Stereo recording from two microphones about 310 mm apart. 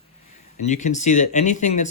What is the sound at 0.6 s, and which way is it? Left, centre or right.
Speech, left.